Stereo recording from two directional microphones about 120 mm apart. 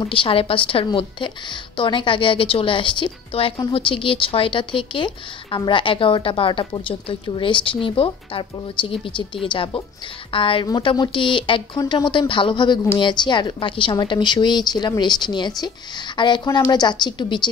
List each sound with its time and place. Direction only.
0.1 s a woman's voice: 45° left (ahead or behind)